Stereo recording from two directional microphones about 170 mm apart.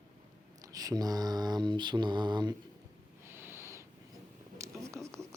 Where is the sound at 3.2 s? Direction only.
15° right (ahead or behind).